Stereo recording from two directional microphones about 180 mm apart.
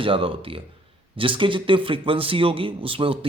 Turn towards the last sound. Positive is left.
turn(degrees=-30)  # may be behind; listen again after turning